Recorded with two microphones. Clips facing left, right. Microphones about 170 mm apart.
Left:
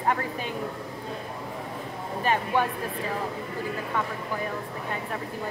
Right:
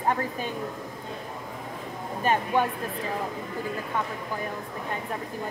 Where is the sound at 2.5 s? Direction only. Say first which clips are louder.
Right 1 dB; 15° right (ahead or behind).